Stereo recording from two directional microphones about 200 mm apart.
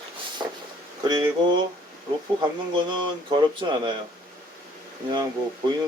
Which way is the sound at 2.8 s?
25° right (ahead or behind).